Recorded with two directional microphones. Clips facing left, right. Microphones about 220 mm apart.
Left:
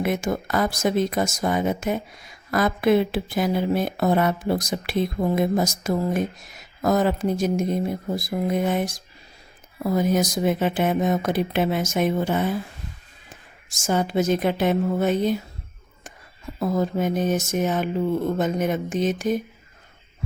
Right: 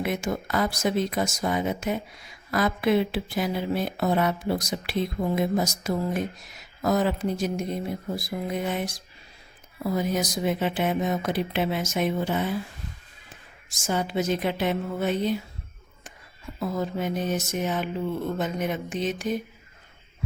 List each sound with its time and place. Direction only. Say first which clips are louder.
0.0 s speech: left 4 dB; 45° left (ahead or behind)
13.7 s speech: left 4 dB; 45° left (ahead or behind)
16.6 s speech: left 5 dB; 45° left (ahead or behind)